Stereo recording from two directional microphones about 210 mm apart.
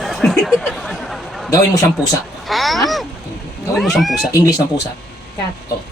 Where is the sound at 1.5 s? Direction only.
15° left (ahead or behind).